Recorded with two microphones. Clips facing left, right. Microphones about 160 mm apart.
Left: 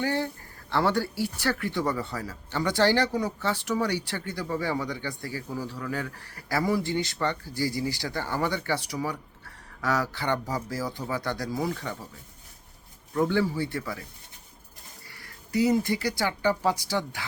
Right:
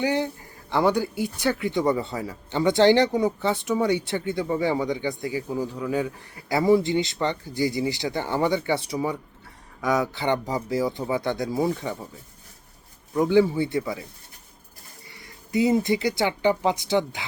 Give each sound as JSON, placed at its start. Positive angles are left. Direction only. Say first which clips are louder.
{"t": 0.0, "sound": "speech", "louder": "right 4 dB", "side_deg": -15}
{"t": 13.1, "sound": "speech", "louder": "right 6 dB", "side_deg": -15}
{"t": 15.1, "sound": "speech", "louder": "right 3 dB", "side_deg": -20}